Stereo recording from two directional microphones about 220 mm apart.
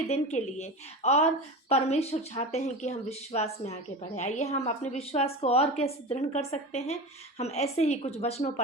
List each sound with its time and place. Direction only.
0.1 s a woman's voice: 30° left (ahead or behind)